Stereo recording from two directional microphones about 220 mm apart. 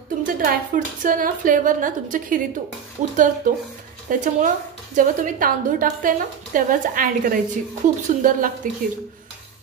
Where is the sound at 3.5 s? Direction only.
35° right (ahead or behind).